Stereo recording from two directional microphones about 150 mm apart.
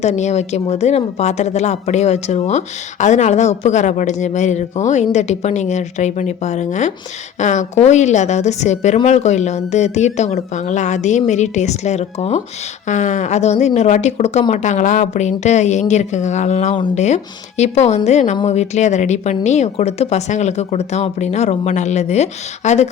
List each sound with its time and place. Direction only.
0.0 s speech: 50° left (ahead or behind)